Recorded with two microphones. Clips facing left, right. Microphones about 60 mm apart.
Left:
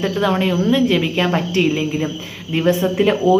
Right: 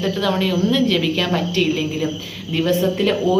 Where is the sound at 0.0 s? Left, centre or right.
Left.